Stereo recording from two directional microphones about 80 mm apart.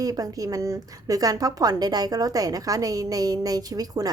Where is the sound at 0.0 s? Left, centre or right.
Right.